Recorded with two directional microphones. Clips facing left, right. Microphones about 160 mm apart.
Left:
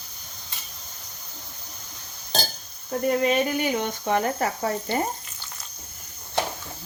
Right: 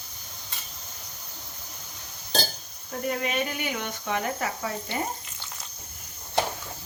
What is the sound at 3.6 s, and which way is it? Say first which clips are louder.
Speech: left 7 dB; 35° left (ahead or behind).